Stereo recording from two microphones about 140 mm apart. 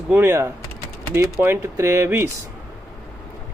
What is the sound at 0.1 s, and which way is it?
Speech, 15° right (ahead or behind).